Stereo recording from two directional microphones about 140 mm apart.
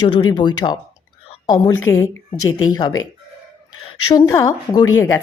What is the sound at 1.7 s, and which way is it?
A woman's voice, 20° left (ahead or behind).